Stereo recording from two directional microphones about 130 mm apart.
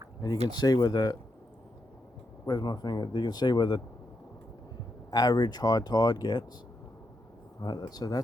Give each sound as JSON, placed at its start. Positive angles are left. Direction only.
{"t": 0.4, "sound": "speech", "side_deg": 30}
{"t": 2.5, "sound": "speech", "side_deg": 30}
{"t": 5.1, "sound": "speech", "side_deg": 30}
{"t": 7.6, "sound": "speech", "side_deg": 30}